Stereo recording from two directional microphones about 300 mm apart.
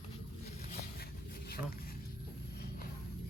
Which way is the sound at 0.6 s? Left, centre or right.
Left.